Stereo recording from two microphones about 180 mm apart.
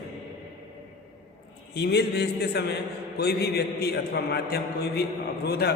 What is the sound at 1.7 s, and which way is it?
A man's voice, 65° left (ahead or behind).